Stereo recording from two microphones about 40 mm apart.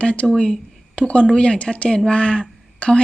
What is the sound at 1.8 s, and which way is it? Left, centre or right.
Speech, centre.